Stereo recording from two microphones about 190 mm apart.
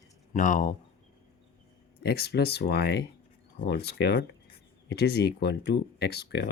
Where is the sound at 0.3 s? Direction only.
40° left (ahead or behind).